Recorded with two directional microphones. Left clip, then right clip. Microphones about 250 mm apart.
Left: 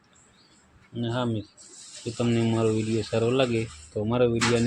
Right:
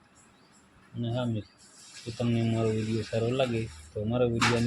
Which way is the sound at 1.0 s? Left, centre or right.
Left.